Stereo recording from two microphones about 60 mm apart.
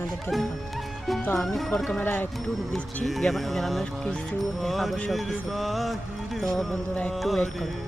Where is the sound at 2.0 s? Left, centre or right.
Left.